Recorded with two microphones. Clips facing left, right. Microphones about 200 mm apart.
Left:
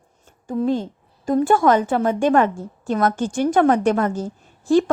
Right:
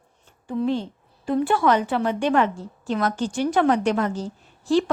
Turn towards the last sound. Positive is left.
turn(degrees=50)  # may be behind; listen again after turning